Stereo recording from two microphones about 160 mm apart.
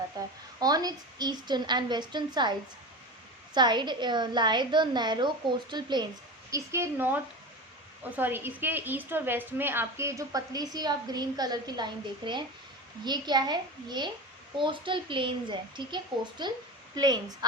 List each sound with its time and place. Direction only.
0.2 s a woman's voice: 25° right (ahead or behind)
6.5 s a woman's voice: 15° right (ahead or behind)